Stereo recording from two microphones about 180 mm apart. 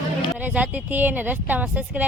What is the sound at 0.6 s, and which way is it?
Speech, 10° right (ahead or behind).